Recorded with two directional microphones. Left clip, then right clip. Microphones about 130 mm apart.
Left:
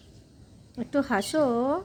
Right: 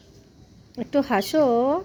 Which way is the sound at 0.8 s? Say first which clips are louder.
Right 4 dB; 15° right (ahead or behind).